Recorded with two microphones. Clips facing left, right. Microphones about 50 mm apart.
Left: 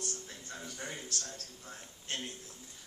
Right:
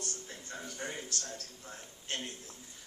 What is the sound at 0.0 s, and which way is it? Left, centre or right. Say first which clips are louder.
Music: even; right.